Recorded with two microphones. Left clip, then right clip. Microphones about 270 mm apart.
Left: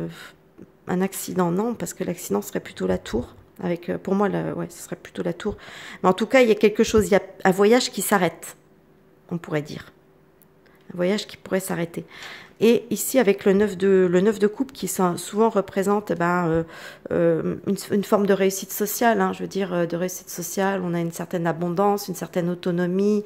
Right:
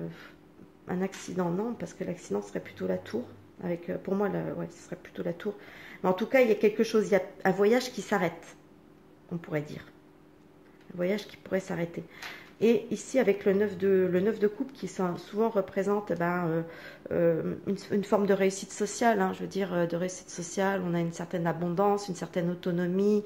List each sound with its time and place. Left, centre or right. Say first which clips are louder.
0.8 s a woman's voice: left 8 dB; left
9.3 s a woman's voice: left 7 dB; left
11.0 s a woman's voice: left 7 dB; left